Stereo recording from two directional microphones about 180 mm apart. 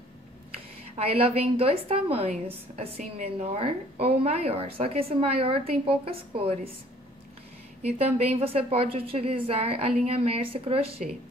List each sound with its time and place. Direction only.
0.9 s a woman's voice: 30° right (ahead or behind)
7.8 s a woman's voice: 35° right (ahead or behind)